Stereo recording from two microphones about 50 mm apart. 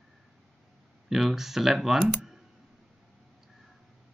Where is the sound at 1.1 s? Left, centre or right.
Centre.